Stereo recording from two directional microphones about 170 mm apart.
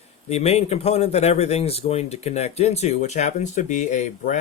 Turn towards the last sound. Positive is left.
turn(degrees=45)  # may be behind; listen again after turning